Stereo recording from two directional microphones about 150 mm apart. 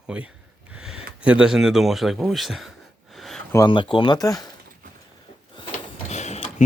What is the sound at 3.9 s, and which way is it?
Speech, 30° left (ahead or behind).